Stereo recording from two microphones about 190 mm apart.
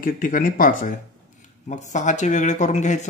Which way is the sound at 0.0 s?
45° left (ahead or behind).